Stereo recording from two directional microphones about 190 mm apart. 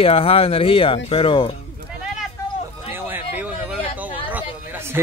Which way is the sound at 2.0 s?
Centre (ahead or behind).